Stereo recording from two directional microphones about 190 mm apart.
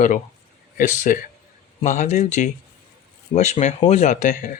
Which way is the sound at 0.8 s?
45° left (ahead or behind).